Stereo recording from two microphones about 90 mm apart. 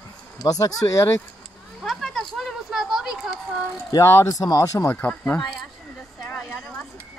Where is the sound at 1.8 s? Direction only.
5° left (ahead or behind).